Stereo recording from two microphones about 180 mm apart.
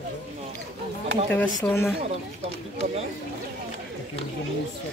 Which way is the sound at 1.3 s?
15° left (ahead or behind).